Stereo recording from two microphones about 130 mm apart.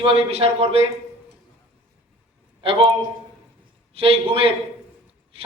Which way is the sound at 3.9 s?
50° right (ahead or behind).